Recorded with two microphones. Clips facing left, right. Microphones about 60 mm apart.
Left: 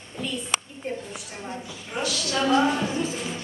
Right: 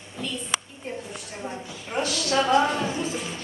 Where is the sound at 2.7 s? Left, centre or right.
Centre.